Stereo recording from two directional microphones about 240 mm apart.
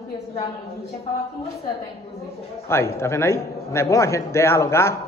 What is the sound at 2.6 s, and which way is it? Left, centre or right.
A man's voice, centre.